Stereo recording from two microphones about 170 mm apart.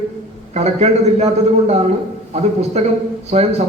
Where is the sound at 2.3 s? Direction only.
35° right (ahead or behind).